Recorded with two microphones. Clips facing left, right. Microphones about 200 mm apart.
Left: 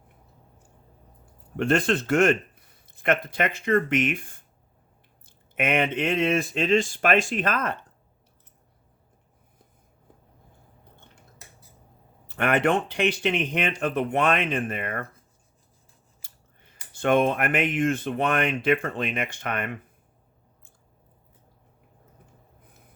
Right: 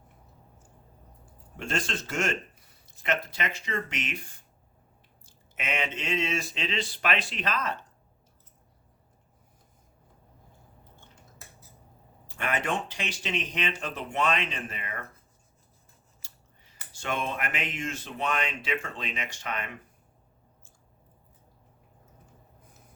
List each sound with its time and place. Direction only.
1.2 s speech: 60° left (ahead or behind)
12.3 s speech: 60° left (ahead or behind)
16.2 s scissors: 55° left (ahead or behind)
16.9 s speech: 55° left (ahead or behind)